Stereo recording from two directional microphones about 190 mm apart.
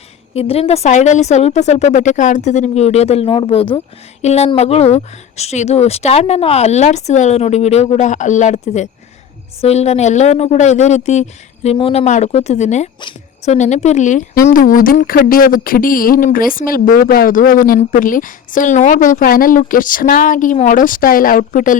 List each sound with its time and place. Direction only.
0.3 s speech: 30° left (ahead or behind)